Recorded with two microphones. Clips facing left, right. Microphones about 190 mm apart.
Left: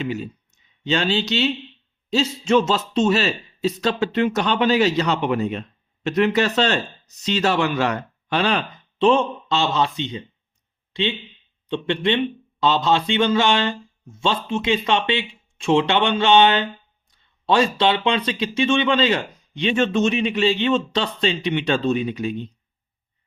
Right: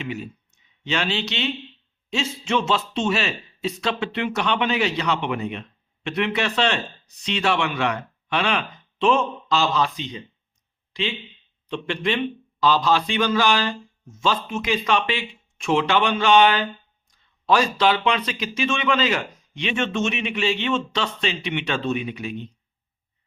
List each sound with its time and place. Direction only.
0.0 s speech: 35° left (ahead or behind)
11.7 s a man's voice: 30° left (ahead or behind)